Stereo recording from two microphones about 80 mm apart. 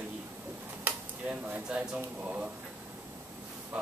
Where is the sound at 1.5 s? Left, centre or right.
Centre.